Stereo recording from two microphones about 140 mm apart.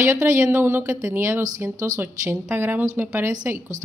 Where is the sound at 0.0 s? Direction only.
20° right (ahead or behind).